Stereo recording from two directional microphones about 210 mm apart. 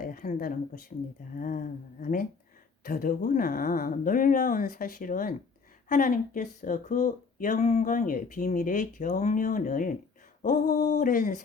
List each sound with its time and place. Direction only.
0.0 s speech: 40° left (ahead or behind)